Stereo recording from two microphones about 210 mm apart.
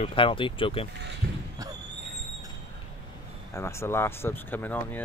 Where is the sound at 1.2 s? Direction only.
45° right (ahead or behind).